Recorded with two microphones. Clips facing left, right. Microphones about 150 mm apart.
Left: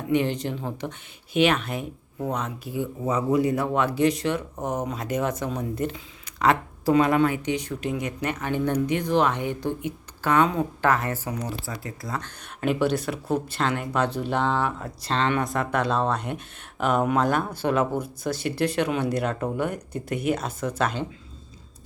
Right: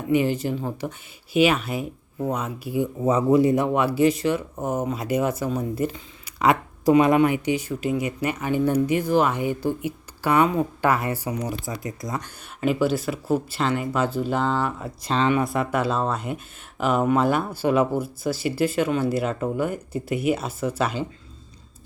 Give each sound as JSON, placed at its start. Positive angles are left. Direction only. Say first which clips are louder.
{"t": 0.1, "sound": "speech", "louder": "right 3 dB", "side_deg": -5}
{"t": 3.0, "sound": "speech", "louder": "right 4 dB", "side_deg": -25}
{"t": 3.8, "sound": "speech", "louder": "right 2 dB", "side_deg": -5}
{"t": 12.5, "sound": "speech", "louder": "right 1 dB", "side_deg": 0}